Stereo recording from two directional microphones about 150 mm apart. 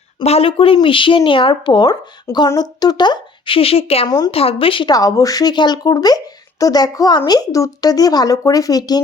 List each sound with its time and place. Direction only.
0.2 s speech: 40° left (ahead or behind); by 9.0 s 25° left (ahead or behind)